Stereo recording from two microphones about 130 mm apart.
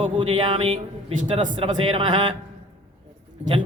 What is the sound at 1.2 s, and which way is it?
Speech, 75° right (ahead or behind).